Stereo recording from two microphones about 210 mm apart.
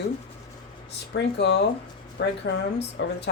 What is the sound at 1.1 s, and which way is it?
Speech, 55° left (ahead or behind).